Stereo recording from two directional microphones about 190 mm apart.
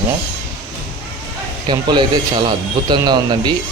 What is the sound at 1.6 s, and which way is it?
Speech, 25° right (ahead or behind).